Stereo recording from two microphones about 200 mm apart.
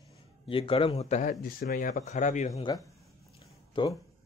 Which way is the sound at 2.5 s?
20° left (ahead or behind).